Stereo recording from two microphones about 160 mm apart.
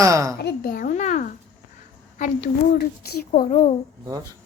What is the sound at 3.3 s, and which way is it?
Speech, 45° left (ahead or behind).